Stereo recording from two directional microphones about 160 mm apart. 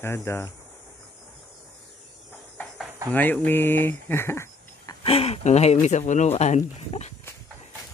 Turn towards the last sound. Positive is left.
turn(degrees=45)  # may be behind; listen again after turning